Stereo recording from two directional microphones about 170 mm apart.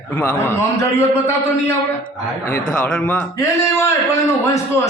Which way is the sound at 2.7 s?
5° left (ahead or behind).